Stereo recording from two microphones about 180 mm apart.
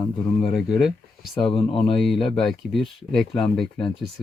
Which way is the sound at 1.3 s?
30° left (ahead or behind).